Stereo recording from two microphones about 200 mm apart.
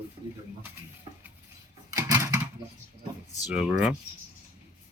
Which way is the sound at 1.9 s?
15° right (ahead or behind).